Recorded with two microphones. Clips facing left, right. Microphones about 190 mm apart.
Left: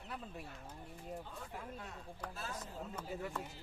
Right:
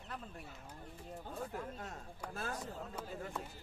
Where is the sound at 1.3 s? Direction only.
45° right (ahead or behind).